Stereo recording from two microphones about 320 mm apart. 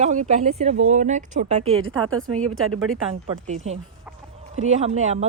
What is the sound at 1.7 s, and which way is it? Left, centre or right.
Speech, right.